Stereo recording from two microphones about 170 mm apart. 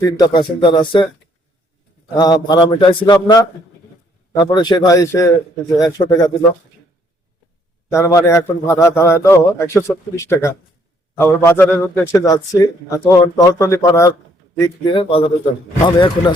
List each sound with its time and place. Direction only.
0.2 s a man's voice: 25° left (ahead or behind)
2.1 s a man's voice: 25° left (ahead or behind)
7.9 s a man's voice: 15° left (ahead or behind)
14.6 s a man's voice: 30° left (ahead or behind)